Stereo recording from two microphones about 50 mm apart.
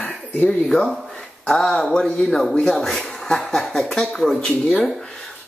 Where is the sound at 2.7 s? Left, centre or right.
Centre.